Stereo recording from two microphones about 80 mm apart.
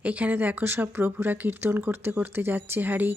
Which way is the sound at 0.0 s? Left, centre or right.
Centre.